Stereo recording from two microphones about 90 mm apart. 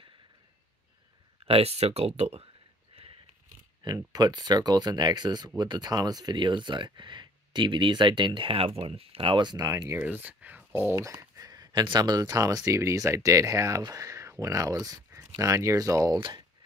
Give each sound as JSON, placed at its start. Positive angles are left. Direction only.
{"t": 1.4, "sound": "speech", "side_deg": -90}
{"t": 3.8, "sound": "speech", "side_deg": -45}
{"t": 9.8, "sound": "speech", "side_deg": -20}
{"t": 11.0, "sound": "speech", "side_deg": -35}
{"t": 15.0, "sound": "speech", "side_deg": -30}
{"t": 16.2, "sound": "speech", "side_deg": -65}